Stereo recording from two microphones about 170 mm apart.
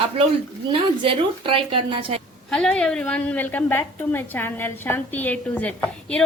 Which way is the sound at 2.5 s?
5° left (ahead or behind).